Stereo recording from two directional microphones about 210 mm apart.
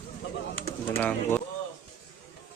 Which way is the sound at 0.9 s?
10° left (ahead or behind).